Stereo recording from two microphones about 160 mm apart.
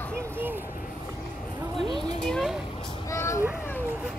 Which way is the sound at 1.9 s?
30° right (ahead or behind).